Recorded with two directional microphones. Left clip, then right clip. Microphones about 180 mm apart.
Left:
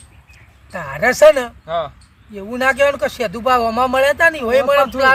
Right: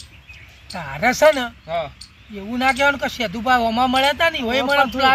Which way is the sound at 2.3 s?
50° left (ahead or behind).